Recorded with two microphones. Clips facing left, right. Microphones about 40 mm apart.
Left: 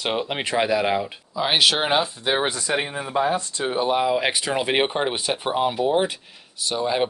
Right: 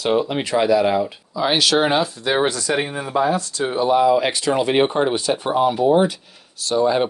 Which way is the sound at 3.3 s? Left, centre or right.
Left.